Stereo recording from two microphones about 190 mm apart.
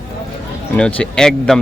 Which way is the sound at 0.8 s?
5° left (ahead or behind).